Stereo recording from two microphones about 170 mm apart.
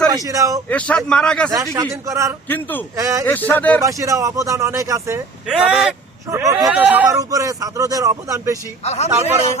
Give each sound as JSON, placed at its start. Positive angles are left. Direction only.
{"t": 0.3, "sound": "speech", "side_deg": -20}
{"t": 0.7, "sound": "a man's voice", "side_deg": 5}
{"t": 1.7, "sound": "a man's voice", "side_deg": -20}
{"t": 2.5, "sound": "speech", "side_deg": 10}
{"t": 2.9, "sound": "a man's voice", "side_deg": -20}
{"t": 3.2, "sound": "speech", "side_deg": 10}
{"t": 3.8, "sound": "speech", "side_deg": -20}
{"t": 5.5, "sound": "a man's voice", "side_deg": -5}
{"t": 6.3, "sound": "speech", "side_deg": -20}
{"t": 6.7, "sound": "a man's voice", "side_deg": -10}
{"t": 7.1, "sound": "speech", "side_deg": -20}
{"t": 8.8, "sound": "speech", "side_deg": 40}